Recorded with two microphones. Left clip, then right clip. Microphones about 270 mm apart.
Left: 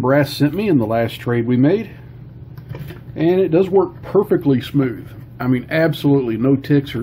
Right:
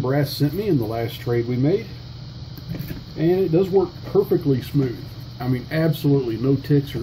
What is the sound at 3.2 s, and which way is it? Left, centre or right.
Speech, left.